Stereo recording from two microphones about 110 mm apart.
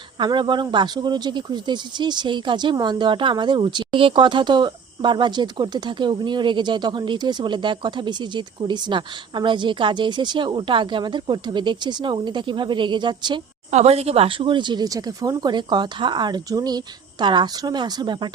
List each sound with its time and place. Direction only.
0.2 s speech: 45° right (ahead or behind)
13.7 s speech: 80° right; by 18.3 s 45° right (ahead or behind)